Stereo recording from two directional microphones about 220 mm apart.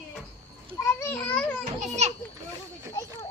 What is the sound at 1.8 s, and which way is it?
Speech, 30° right (ahead or behind).